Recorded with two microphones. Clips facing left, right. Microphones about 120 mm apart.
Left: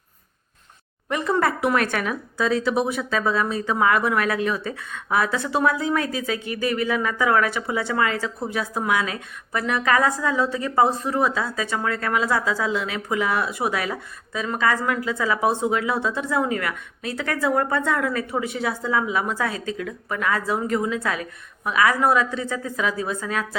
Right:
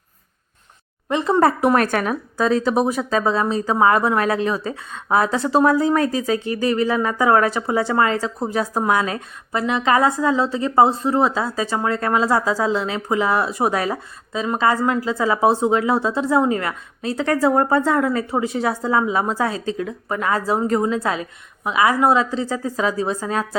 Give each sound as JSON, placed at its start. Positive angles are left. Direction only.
{"t": 1.1, "sound": "speech", "side_deg": -30}
{"t": 9.5, "sound": "speech", "side_deg": -25}